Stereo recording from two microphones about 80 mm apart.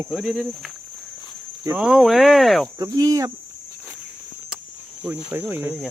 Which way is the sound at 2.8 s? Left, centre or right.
Right.